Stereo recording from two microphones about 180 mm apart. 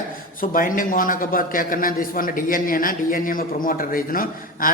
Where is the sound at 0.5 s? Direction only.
50° left (ahead or behind).